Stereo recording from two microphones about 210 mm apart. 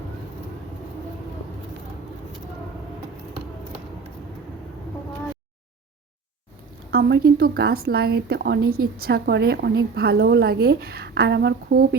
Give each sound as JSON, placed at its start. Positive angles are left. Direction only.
{"t": 6.9, "sound": "a woman's voice", "side_deg": -45}